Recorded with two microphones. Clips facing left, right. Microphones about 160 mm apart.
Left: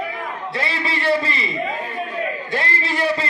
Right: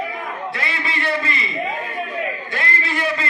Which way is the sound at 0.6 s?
30° left (ahead or behind).